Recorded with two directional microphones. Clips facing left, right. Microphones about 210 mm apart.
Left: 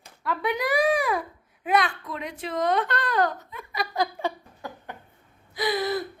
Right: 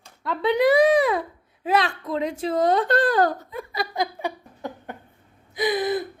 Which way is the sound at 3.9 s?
15° right (ahead or behind).